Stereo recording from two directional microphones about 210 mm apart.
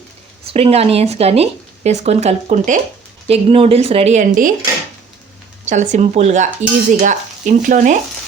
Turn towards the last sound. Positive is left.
turn(degrees=-35)  # may be behind; listen again after turning